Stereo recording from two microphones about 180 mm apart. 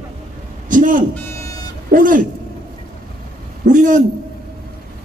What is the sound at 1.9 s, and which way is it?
Speech, 50° right (ahead or behind).